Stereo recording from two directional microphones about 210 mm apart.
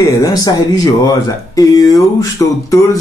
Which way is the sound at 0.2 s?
15° left (ahead or behind).